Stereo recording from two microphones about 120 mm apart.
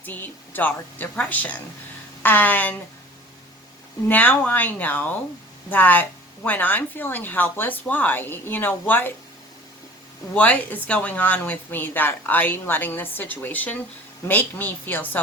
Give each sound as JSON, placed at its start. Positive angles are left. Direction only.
{"t": 0.0, "sound": "speech", "side_deg": 15}
{"t": 4.1, "sound": "speech", "side_deg": 15}
{"t": 10.3, "sound": "speech", "side_deg": 10}